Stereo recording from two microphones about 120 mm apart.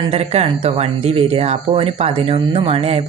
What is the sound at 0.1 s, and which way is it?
Speech, 60° right (ahead or behind).